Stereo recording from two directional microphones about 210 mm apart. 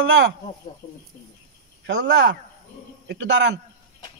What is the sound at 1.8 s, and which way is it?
Speech, 60° right (ahead or behind).